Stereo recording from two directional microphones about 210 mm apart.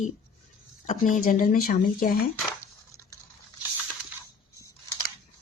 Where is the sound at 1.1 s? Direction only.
40° left (ahead or behind).